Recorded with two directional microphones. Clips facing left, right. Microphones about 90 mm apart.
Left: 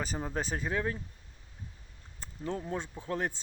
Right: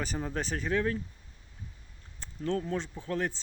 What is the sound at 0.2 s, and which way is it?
Speech, 10° left (ahead or behind).